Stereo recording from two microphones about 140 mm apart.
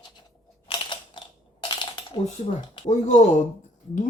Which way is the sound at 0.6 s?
35° left (ahead or behind).